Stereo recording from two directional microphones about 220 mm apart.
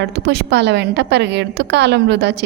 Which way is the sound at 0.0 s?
50° right (ahead or behind).